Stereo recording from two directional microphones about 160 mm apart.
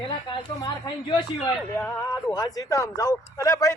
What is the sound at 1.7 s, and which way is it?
Speech, 15° left (ahead or behind).